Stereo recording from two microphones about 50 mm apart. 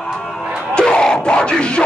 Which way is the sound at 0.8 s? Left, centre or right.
Centre.